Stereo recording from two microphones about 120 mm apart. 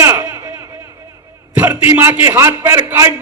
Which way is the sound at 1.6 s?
15° right (ahead or behind).